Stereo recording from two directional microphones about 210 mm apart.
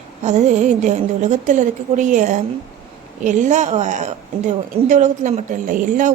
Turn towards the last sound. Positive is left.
turn(degrees=-40)  # may be behind; listen again after turning